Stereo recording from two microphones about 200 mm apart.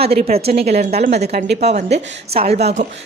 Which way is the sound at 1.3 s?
55° right (ahead or behind).